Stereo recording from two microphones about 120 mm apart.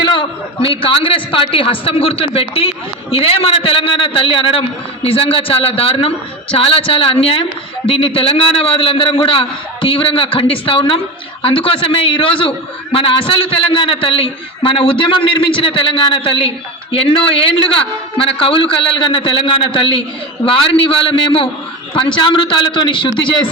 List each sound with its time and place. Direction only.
0.0 s a man's voice: 40° left (ahead or behind)